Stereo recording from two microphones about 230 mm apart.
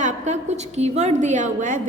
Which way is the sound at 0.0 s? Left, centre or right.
Right.